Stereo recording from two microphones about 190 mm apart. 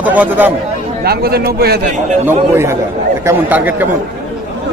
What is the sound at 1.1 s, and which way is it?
Speech, 55° right (ahead or behind).